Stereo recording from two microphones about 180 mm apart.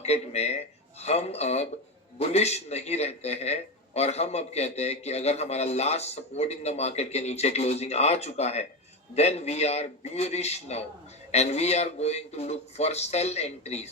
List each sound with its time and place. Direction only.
0.0 s a man's voice: 35° left (ahead or behind)